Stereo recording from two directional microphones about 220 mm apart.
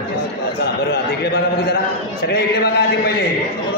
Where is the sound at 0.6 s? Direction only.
45° left (ahead or behind).